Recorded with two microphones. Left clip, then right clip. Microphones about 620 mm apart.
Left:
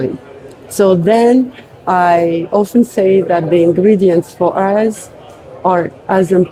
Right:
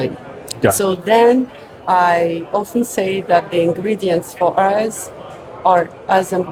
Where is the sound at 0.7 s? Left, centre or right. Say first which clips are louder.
Left 7 dB; left.